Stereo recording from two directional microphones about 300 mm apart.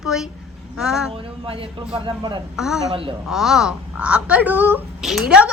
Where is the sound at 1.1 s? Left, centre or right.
Centre.